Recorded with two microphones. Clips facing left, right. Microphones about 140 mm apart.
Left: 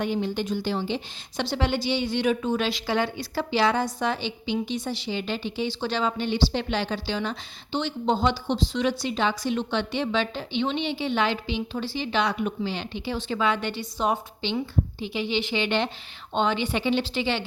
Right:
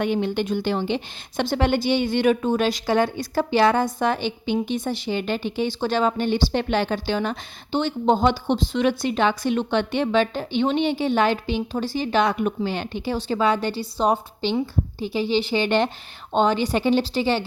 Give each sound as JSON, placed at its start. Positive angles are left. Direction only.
{"t": 0.0, "sound": "a woman's voice", "side_deg": -65}